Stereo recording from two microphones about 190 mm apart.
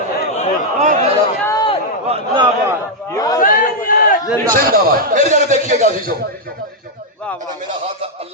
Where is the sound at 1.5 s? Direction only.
25° left (ahead or behind).